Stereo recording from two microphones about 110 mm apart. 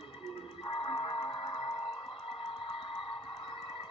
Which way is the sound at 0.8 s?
50° left (ahead or behind).